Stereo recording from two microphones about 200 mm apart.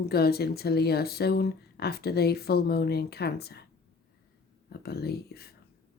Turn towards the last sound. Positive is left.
turn(degrees=55)  # may be behind; listen again after turning